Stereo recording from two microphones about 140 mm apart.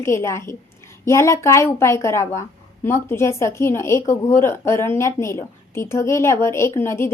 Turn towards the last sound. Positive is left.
turn(degrees=15)  # may be behind; listen again after turning